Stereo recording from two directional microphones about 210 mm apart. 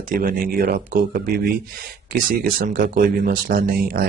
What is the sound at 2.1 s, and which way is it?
Speech, 40° right (ahead or behind).